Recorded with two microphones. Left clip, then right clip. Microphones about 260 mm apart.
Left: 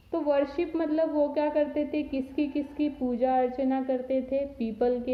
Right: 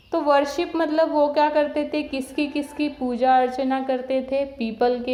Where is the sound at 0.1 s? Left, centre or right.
Centre.